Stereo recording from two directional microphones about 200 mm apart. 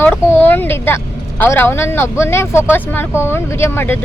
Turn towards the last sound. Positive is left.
turn(degrees=10)  # may be behind; listen again after turning